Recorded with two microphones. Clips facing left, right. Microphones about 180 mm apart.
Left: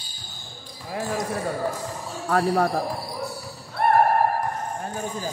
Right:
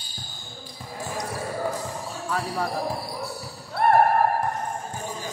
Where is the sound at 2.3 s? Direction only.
55° left (ahead or behind).